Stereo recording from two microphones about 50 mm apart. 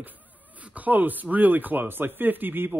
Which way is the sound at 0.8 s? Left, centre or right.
Right.